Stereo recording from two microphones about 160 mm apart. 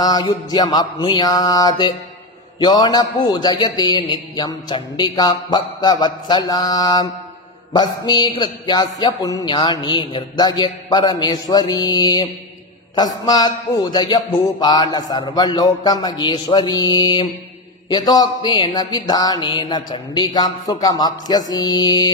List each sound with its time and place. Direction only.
0.0 s speech: 25° left (ahead or behind)